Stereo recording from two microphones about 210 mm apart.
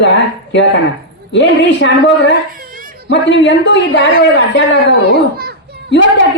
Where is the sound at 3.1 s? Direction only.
55° left (ahead or behind).